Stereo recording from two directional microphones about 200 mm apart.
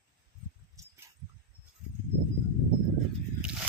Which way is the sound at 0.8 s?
15° right (ahead or behind).